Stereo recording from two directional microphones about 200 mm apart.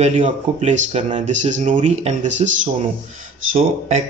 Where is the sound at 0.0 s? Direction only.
35° right (ahead or behind).